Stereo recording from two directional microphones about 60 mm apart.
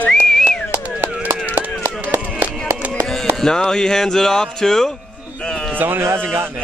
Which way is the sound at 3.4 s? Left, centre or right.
Centre.